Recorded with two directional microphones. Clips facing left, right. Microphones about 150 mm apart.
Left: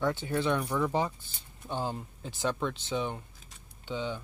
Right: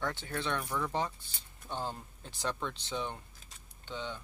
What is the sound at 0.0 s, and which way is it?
Speech, 5° left (ahead or behind).